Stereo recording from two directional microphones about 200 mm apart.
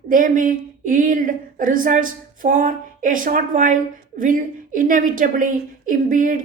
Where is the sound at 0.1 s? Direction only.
40° right (ahead or behind).